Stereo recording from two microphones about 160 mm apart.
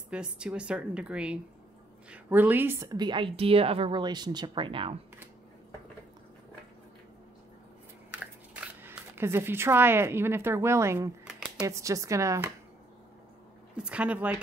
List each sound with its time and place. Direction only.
0.1 s a woman's voice: 5° right (ahead or behind); by 4.9 s 35° right (ahead or behind)
8.8 s a woman's voice: 15° right (ahead or behind)
13.7 s speech: 5° right (ahead or behind)